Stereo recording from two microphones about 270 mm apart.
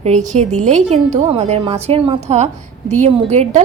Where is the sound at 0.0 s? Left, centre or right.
Right.